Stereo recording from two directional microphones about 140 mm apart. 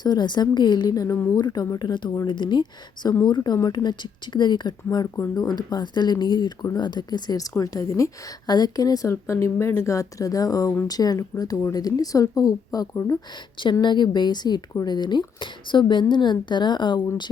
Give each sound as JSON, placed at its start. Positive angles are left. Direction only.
{"t": 0.0, "sound": "speech", "side_deg": 30}